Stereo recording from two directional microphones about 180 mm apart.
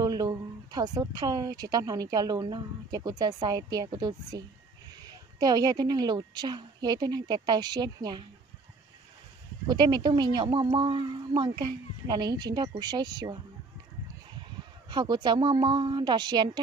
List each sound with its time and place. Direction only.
0.0 s speech: 20° right (ahead or behind)
9.7 s speech: 25° right (ahead or behind)
14.9 s speech: 25° right (ahead or behind)